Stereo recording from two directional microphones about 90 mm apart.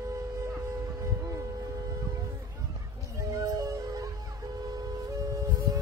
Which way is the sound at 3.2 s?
35° right (ahead or behind).